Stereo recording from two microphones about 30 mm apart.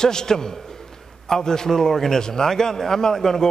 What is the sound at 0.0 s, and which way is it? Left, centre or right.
A man's voice, left.